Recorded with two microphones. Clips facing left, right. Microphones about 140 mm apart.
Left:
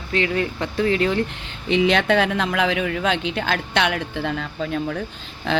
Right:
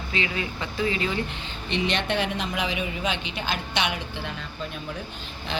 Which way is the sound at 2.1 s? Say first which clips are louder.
Left 7 dB; 90° left.